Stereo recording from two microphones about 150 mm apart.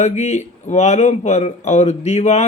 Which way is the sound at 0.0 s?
50° left (ahead or behind).